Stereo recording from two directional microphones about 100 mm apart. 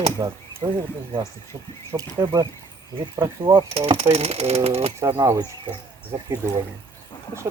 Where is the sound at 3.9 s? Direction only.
90° right.